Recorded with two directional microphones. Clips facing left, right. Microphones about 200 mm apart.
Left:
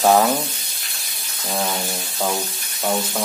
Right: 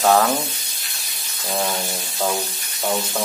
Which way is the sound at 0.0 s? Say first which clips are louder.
Left 1 dB; 15° left (ahead or behind).